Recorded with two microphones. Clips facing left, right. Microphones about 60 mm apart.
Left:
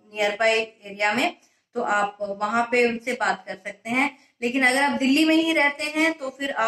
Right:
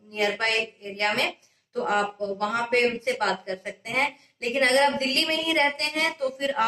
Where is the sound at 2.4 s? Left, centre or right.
Left.